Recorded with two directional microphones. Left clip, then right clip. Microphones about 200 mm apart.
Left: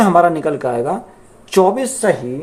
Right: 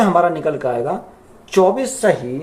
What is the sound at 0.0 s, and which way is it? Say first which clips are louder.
Speech: left 3 dB; 30° left (ahead or behind).